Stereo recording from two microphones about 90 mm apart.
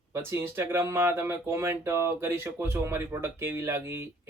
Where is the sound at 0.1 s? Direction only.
30° right (ahead or behind).